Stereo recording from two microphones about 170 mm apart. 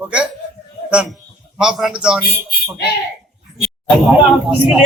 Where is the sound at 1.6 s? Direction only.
5° right (ahead or behind).